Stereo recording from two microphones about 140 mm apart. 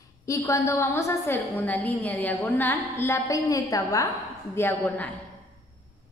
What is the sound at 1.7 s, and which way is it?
A woman's voice, 10° left (ahead or behind).